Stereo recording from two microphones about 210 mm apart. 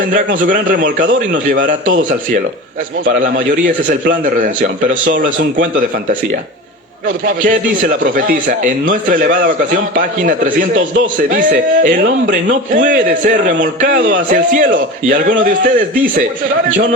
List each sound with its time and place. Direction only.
0.3 s a man's voice: 40° right (ahead or behind)
3.1 s speech: 40° right (ahead or behind)
7.3 s a man's voice: 40° right (ahead or behind)